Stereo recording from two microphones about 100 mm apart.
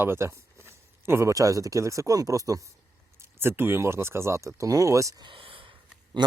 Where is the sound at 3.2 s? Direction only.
25° right (ahead or behind).